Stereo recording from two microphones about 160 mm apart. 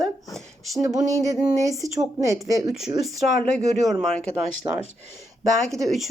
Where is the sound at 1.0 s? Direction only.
20° right (ahead or behind).